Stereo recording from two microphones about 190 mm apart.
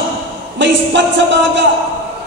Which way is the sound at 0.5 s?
70° right (ahead or behind).